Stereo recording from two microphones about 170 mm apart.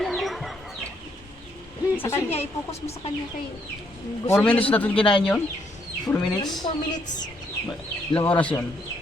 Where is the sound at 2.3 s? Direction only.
40° left (ahead or behind).